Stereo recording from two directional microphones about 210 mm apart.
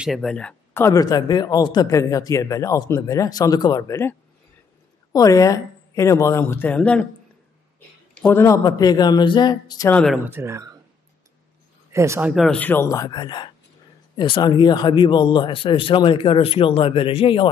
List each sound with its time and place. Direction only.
0.0 s speech: centre (ahead or behind)
8.2 s speech: 10° left (ahead or behind)
10.1 s speech: 10° right (ahead or behind)
11.9 s speech: 15° right (ahead or behind); by 17.5 s 25° left (ahead or behind)